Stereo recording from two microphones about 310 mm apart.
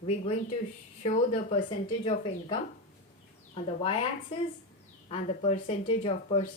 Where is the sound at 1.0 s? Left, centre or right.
Left.